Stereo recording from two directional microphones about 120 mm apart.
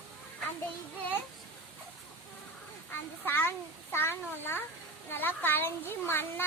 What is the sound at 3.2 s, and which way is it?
A child's voice, 15° left (ahead or behind).